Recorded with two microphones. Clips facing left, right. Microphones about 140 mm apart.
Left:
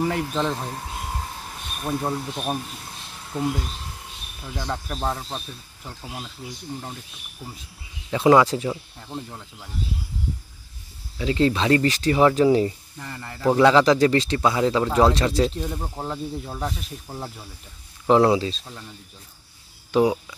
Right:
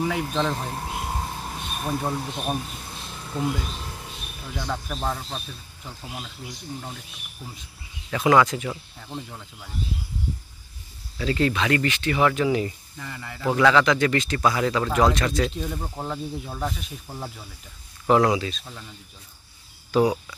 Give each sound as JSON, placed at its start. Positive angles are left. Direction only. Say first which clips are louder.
{"t": 0.0, "sound": "speech", "louder": "left 1 dB", "side_deg": 0}
{"t": 1.9, "sound": "speech", "louder": "left 2 dB", "side_deg": 5}
{"t": 4.6, "sound": "speech", "louder": "left 1 dB", "side_deg": 5}
{"t": 5.0, "sound": "speech", "louder": "left 3 dB", "side_deg": 20}
{"t": 8.1, "sound": "speech", "louder": "left 3 dB", "side_deg": 25}
{"t": 8.6, "sound": "speech", "louder": "left 4 dB", "side_deg": 10}
{"t": 11.1, "sound": "speech", "louder": "left 2 dB", "side_deg": 20}
{"t": 13.0, "sound": "speech", "louder": "left 1 dB", "side_deg": 0}
{"t": 13.5, "sound": "speech", "louder": "left 3 dB", "side_deg": 30}
{"t": 15.7, "sound": "speech", "louder": "left 1 dB", "side_deg": 10}
{"t": 18.0, "sound": "speech", "louder": "left 2 dB", "side_deg": 25}
{"t": 19.9, "sound": "speech", "louder": "left 1 dB", "side_deg": 20}